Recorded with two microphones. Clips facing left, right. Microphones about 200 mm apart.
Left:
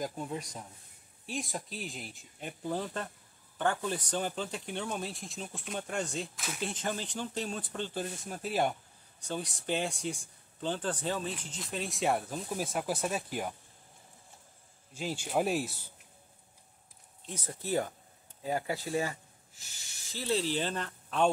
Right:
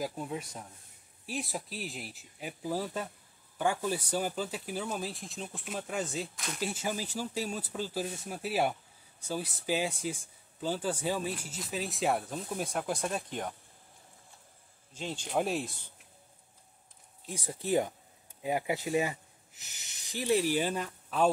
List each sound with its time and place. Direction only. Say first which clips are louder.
0.0 s speech: right 1 dB; 5° right (ahead or behind)
15.0 s speech: left 1 dB; 5° left (ahead or behind)
17.3 s speech: right 3 dB; 10° right (ahead or behind)